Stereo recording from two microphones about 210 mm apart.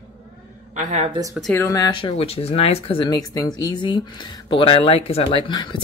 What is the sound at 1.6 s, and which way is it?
Speech, 15° left (ahead or behind).